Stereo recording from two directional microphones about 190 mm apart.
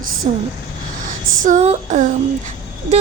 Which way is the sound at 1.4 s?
40° right (ahead or behind).